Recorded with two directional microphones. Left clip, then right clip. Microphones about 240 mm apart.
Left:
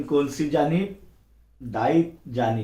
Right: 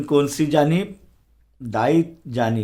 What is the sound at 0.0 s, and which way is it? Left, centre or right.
Speech, right.